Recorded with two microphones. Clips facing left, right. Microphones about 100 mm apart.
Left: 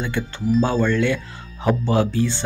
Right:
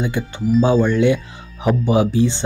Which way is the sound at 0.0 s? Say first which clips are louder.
Right 3 dB; 15° right (ahead or behind).